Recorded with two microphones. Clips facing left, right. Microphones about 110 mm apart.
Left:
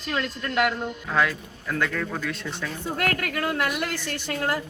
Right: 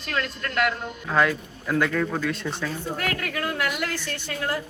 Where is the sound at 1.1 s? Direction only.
5° right (ahead or behind).